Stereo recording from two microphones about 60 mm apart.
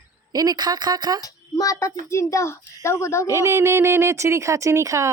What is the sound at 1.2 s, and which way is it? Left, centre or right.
A child's voice, left.